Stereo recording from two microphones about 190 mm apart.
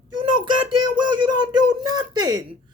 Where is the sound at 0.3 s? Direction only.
25° right (ahead or behind).